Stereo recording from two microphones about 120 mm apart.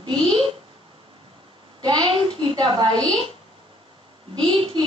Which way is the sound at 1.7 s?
35° right (ahead or behind).